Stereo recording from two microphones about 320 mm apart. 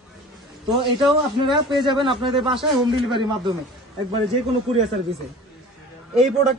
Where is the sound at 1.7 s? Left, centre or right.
Centre.